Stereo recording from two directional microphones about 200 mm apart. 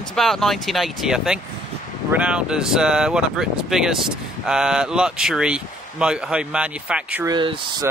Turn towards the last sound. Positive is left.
turn(degrees=-20)  # may be behind; listen again after turning